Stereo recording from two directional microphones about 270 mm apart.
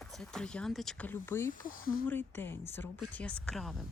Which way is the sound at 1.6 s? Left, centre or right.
Left.